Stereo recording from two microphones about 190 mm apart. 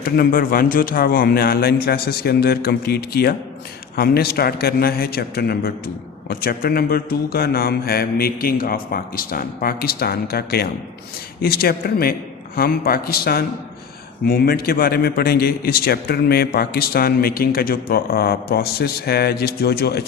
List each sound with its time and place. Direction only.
0.0 s a man's voice: 50° left (ahead or behind)